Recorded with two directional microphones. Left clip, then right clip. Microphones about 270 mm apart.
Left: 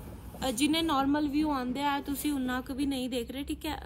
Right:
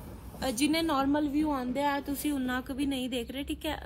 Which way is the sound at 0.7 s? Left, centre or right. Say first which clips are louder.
Even; centre.